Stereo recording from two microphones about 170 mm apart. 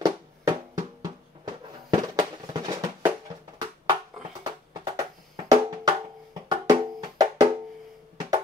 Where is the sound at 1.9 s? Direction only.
20° right (ahead or behind).